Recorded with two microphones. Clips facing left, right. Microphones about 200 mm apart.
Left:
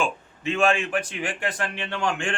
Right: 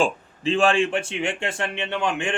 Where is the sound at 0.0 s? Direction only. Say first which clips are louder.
Right 4 dB; 30° right (ahead or behind).